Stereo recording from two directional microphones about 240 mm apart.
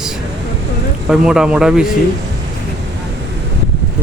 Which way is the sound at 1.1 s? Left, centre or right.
Centre.